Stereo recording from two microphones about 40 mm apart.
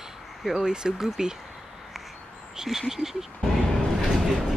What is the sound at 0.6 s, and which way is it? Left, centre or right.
Speech, centre.